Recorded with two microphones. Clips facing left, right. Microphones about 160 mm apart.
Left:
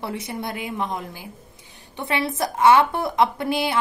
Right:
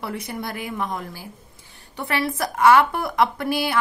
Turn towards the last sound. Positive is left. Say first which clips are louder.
# even
turn(degrees=20)  # may be behind; listen again after turning